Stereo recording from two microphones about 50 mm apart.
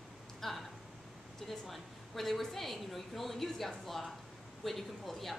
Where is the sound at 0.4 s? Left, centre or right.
Centre.